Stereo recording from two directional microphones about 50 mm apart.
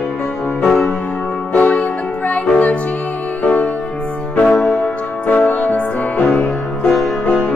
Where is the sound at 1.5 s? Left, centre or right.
Left.